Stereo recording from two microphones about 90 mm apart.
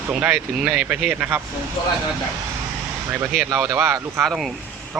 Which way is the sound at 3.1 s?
25° right (ahead or behind).